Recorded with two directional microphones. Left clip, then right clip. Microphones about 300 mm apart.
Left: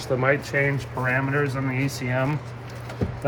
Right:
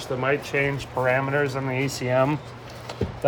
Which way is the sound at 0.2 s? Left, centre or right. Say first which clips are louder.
Even; centre.